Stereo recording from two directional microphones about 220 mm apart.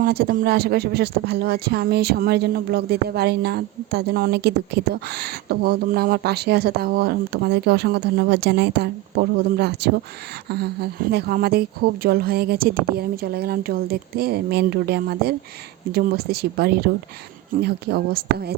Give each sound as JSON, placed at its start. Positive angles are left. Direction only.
{"t": 0.0, "sound": "speech", "side_deg": -40}